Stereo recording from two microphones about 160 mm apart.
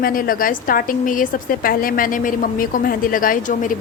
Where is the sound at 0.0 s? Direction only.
60° left (ahead or behind).